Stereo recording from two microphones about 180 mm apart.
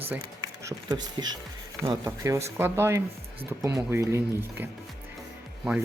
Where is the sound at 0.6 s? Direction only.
20° right (ahead or behind).